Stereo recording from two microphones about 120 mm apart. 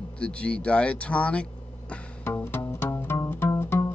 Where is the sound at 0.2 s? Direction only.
10° left (ahead or behind).